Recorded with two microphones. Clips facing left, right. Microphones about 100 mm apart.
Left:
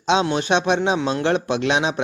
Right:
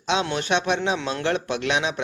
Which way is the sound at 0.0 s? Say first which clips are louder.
Left 5 dB; 25° left (ahead or behind).